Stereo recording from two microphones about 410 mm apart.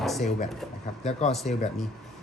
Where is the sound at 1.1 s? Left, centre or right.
Centre.